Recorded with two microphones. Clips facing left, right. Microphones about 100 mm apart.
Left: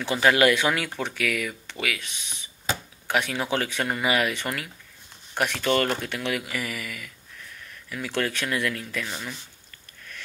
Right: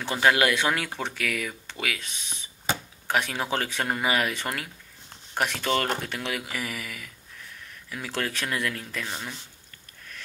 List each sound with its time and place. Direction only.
0.1 s speech: 25° right (ahead or behind)
9.0 s speech: 15° right (ahead or behind)